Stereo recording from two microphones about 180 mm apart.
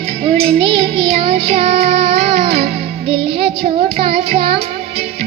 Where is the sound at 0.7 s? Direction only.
35° right (ahead or behind).